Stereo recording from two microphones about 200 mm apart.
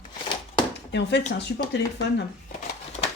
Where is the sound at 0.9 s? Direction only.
60° left (ahead or behind).